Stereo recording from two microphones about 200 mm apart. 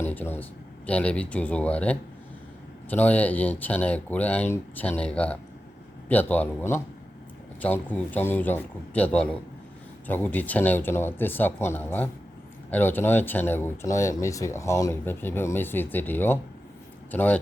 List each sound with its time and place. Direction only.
0.0 s speech: 10° left (ahead or behind)